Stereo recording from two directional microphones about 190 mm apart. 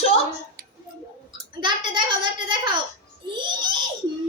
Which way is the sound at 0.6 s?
55° right (ahead or behind).